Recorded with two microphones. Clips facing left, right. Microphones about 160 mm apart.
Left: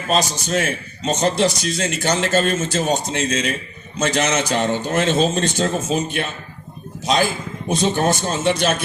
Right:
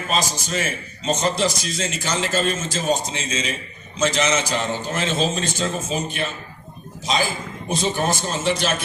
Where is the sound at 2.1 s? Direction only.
60° left (ahead or behind).